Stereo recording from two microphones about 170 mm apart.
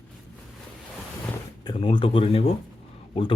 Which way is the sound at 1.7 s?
30° left (ahead or behind).